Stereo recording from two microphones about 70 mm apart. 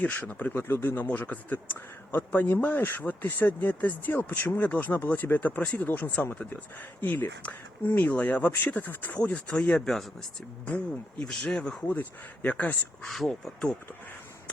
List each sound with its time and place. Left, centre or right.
0.0 s speech: left
1.0 s speech: left
9.8 s speech: centre
11.3 s speech: centre
11.9 s speech: left
13.1 s speech: centre